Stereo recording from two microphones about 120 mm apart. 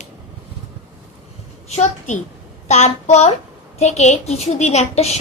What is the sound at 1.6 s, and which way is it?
A child's voice, 75° left (ahead or behind).